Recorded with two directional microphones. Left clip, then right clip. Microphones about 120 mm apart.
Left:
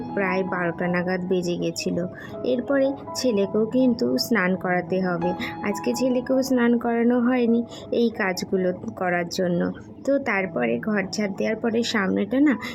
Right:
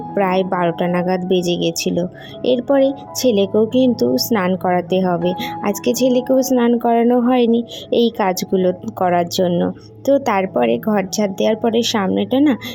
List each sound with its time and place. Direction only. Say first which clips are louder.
0.1 s a woman's voice: right 8 dB; 45° right (ahead or behind)